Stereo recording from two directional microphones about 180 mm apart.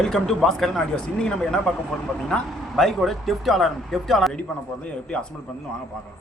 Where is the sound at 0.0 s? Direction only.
5° left (ahead or behind).